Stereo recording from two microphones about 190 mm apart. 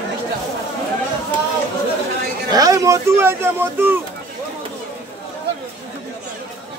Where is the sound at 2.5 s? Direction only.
20° right (ahead or behind).